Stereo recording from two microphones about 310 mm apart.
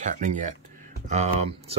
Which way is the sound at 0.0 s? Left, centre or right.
Right.